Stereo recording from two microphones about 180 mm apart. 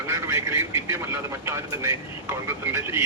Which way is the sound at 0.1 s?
15° right (ahead or behind).